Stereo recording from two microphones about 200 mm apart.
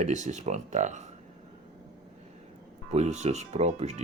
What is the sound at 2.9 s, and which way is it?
Speech, 35° right (ahead or behind).